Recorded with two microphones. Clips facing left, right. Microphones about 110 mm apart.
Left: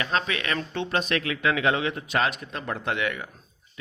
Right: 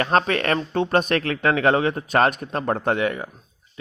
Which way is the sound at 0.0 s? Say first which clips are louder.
Right 7 dB; 50° right (ahead or behind).